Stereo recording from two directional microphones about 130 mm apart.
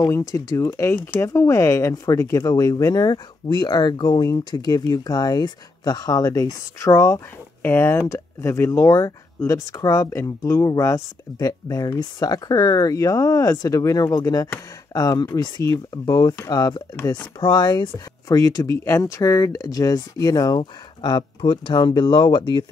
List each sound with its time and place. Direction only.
0.0 s speech: 25° left (ahead or behind)